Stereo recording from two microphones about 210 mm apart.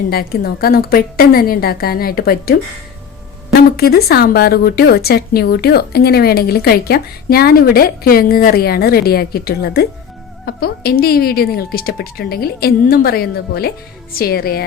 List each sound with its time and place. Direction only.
0.1 s a woman's voice: 45° left (ahead or behind)
3.8 s a woman's voice: 50° left (ahead or behind)